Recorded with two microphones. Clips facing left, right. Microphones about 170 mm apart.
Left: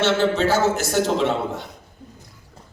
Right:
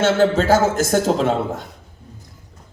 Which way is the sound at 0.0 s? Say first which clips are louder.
Right 3 dB; 45° right (ahead or behind).